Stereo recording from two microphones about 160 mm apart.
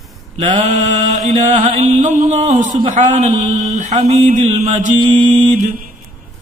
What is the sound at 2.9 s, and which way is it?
Mantra, 50° right (ahead or behind).